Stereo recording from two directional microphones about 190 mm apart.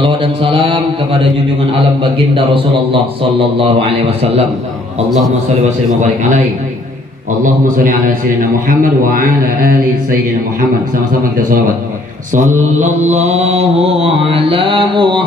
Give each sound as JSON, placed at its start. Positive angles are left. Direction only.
{"t": 0.0, "sound": "mantra", "side_deg": -25}
{"t": 2.3, "sound": "mantra", "side_deg": -30}
{"t": 7.4, "sound": "a man's voice", "side_deg": -45}
{"t": 13.0, "sound": "mantra", "side_deg": -35}